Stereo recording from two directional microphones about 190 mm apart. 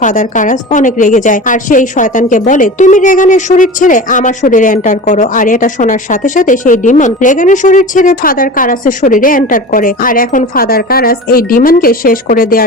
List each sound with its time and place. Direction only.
0.0 s a woman's voice: 40° left (ahead or behind)